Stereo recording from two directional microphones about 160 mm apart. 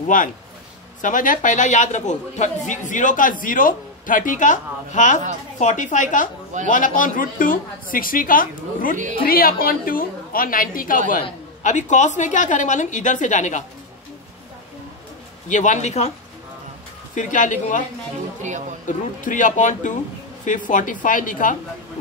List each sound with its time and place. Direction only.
0.0 s a man's voice: 55° left (ahead or behind)
11.6 s a man's voice: 50° left (ahead or behind)
15.4 s a man's voice: 50° left (ahead or behind)
17.1 s a man's voice: 50° left (ahead or behind)
18.9 s a man's voice: 55° left (ahead or behind)